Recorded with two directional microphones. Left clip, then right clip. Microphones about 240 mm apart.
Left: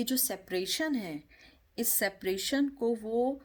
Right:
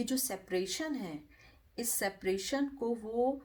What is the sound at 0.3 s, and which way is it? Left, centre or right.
Speech, left.